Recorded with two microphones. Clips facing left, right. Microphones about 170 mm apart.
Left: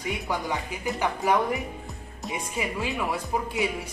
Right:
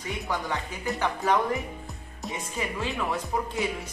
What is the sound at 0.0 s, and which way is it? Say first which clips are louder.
Speech: left 2 dB; 15° left (ahead or behind).